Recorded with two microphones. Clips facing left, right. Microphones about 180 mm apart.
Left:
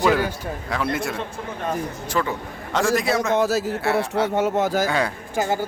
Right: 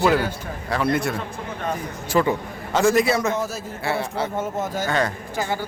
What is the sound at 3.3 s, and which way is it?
Speech, 75° left (ahead or behind).